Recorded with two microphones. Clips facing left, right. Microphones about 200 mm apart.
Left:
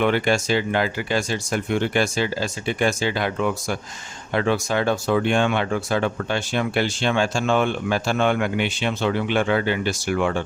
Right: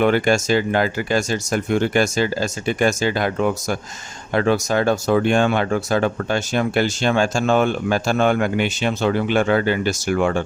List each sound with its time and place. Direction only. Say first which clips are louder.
0.0 s speech: right 3 dB; 45° right (ahead or behind)